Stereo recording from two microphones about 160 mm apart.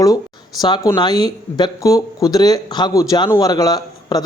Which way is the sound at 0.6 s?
25° left (ahead or behind).